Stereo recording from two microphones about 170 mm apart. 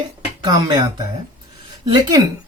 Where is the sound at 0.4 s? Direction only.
25° right (ahead or behind).